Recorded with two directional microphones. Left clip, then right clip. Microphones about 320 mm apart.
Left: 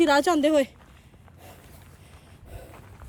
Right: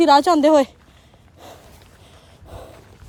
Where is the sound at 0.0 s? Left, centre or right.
Centre.